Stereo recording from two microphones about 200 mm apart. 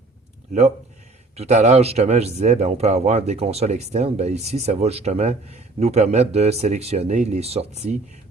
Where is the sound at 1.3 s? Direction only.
35° right (ahead or behind).